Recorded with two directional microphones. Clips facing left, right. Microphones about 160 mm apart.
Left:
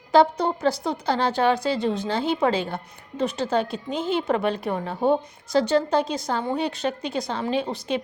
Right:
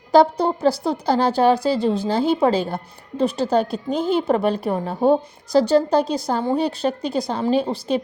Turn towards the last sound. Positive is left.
turn(degrees=-35)  # may be behind; listen again after turning